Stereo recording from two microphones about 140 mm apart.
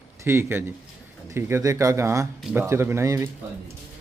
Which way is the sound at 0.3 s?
15° right (ahead or behind).